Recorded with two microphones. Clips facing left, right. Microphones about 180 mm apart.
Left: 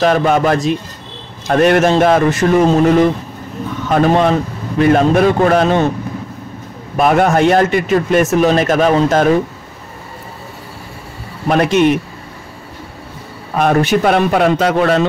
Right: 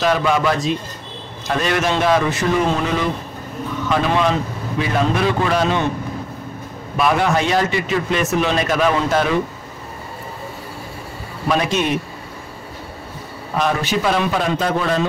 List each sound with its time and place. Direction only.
0.0 s a man's voice: 50° left (ahead or behind)
7.0 s a man's voice: 50° left (ahead or behind)
11.4 s a man's voice: 60° left (ahead or behind)
13.6 s a man's voice: 55° left (ahead or behind); by 15.0 s 70° left (ahead or behind)